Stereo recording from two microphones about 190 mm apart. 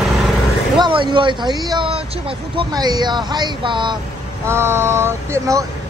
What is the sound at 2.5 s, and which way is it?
Speech, 20° right (ahead or behind).